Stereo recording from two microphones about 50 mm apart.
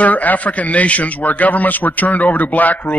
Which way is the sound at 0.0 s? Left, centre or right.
Left.